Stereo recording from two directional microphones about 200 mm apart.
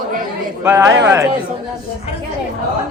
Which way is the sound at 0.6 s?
15° right (ahead or behind).